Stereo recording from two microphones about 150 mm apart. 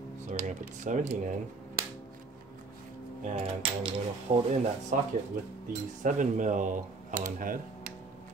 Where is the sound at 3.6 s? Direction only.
35° right (ahead or behind).